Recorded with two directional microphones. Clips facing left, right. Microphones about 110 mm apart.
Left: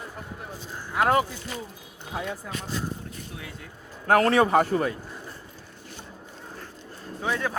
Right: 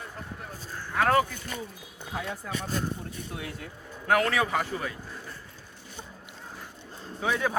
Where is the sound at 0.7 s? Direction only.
20° left (ahead or behind).